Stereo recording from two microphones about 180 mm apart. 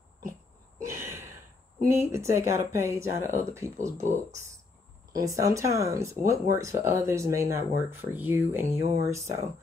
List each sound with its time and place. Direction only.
0.8 s a sound: 15° right (ahead or behind)
1.9 s speech: 15° right (ahead or behind)
5.1 s speech: 20° right (ahead or behind)